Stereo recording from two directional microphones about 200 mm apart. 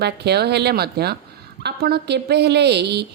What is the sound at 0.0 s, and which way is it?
A woman's voice, 55° right (ahead or behind).